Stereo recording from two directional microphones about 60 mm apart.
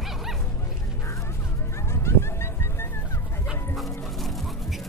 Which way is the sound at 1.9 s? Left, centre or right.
Left.